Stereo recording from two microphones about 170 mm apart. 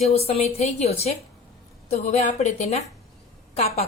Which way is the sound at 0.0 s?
35° left (ahead or behind).